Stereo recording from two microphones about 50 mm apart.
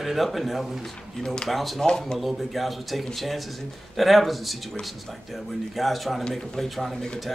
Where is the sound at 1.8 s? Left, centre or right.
Centre.